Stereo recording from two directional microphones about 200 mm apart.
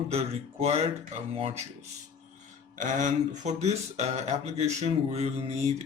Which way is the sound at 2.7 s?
40° right (ahead or behind).